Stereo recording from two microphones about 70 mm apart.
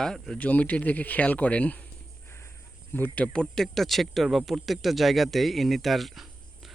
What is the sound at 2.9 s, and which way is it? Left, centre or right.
Speech, left.